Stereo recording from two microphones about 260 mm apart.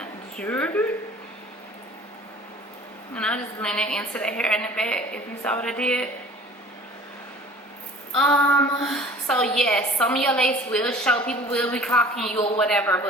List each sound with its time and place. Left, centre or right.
0.0 s a sound: centre
3.2 s a woman's voice: centre
8.1 s a woman's voice: centre